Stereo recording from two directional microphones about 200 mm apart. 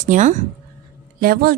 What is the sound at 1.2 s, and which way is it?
Speech, 50° right (ahead or behind).